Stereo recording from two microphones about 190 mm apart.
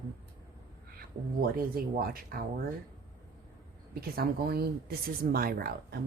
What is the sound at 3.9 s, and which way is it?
Speech, 50° right (ahead or behind).